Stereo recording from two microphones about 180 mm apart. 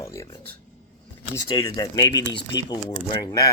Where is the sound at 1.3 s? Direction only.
20° left (ahead or behind).